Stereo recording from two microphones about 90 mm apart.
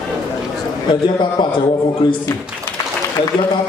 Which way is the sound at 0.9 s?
60° left (ahead or behind).